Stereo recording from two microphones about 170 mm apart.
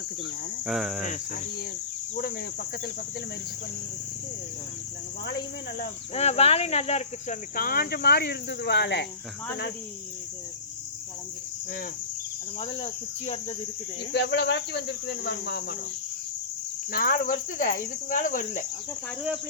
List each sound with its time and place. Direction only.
0.6 s cricket: 5° right (ahead or behind)
1.0 s cricket: 45° left (ahead or behind)
2.1 s speech: 65° left (ahead or behind)
6.1 s speech: 35° left (ahead or behind)
7.5 s speech: 60° left (ahead or behind); by 9.0 s 90° left
12.5 s speech: 35° left (ahead or behind)
14.1 s cricket: 80° left
16.9 s cricket: 55° left (ahead or behind)